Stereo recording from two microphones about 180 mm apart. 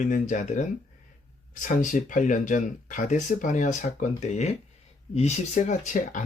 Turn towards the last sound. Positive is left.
turn(degrees=45)  # may be behind; listen again after turning